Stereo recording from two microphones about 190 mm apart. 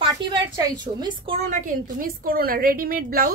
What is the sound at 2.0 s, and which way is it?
A woman's voice, 50° right (ahead or behind).